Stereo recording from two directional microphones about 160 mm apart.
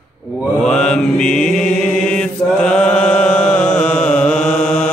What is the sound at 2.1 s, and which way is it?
Chant, 5° left (ahead or behind).